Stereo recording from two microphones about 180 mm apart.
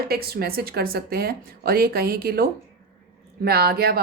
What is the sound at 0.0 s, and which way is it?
A woman's voice, 60° right (ahead or behind).